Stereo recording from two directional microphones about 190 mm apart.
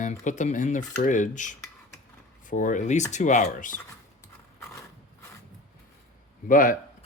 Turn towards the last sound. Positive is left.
turn(degrees=45)  # may be behind; listen again after turning